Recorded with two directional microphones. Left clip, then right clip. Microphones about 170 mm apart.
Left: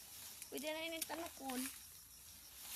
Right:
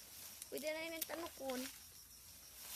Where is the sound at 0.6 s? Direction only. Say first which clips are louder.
Even; 40° right (ahead or behind).